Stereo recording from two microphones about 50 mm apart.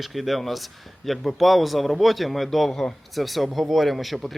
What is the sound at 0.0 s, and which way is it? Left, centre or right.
Speech, centre.